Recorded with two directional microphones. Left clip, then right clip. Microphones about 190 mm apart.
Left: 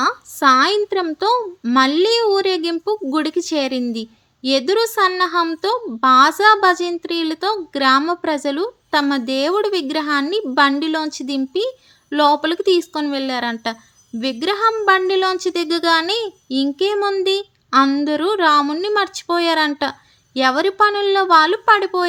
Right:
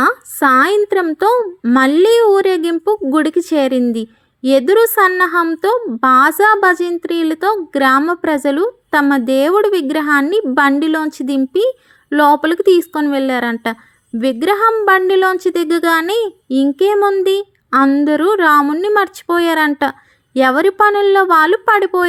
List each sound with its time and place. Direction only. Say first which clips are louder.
0.0 s a woman's voice: right 3 dB; 30° right (ahead or behind)